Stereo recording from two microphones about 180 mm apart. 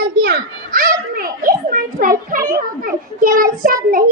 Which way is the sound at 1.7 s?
50° right (ahead or behind).